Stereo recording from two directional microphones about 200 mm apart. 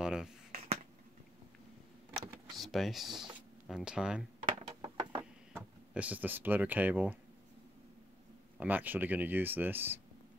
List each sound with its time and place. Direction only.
0.0 s a sound: 5° right (ahead or behind)
2.1 s power windows: centre (ahead or behind)
3.6 s speech: 5° right (ahead or behind)
4.5 s a sound: 25° right (ahead or behind)
5.5 s speech: 5° right (ahead or behind)
8.5 s speech: 10° right (ahead or behind)